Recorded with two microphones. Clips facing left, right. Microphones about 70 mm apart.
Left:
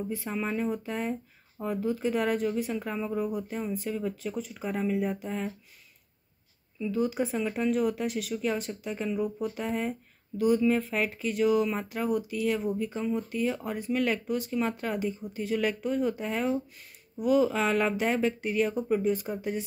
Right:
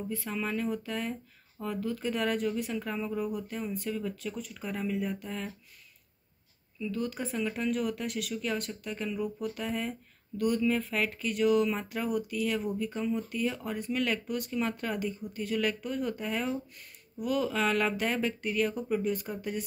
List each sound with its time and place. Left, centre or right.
0.3 s speech: centre
0.8 s speech: centre
6.8 s speech: centre